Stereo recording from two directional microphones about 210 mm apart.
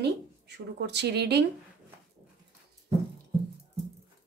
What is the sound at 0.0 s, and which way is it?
Speech, 55° right (ahead or behind).